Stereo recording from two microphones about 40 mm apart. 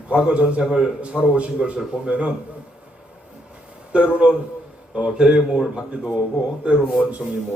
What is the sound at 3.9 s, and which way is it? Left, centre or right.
A man's voice, right.